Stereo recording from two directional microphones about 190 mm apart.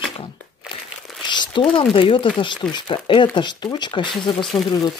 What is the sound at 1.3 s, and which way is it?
Speech, 25° left (ahead or behind).